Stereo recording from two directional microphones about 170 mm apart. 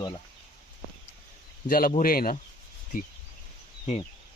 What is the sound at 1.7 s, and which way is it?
Speech, 60° left (ahead or behind).